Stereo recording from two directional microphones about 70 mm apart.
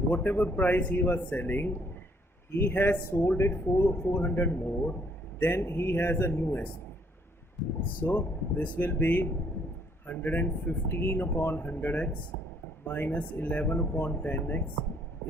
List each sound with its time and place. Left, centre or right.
0.1 s speech: left
7.9 s speech: left
10.8 s speech: left